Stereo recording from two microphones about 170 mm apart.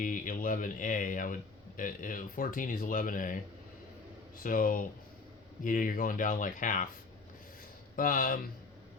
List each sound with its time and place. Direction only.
0.0 s speech: 50° left (ahead or behind)
7.9 s speech: 55° left (ahead or behind)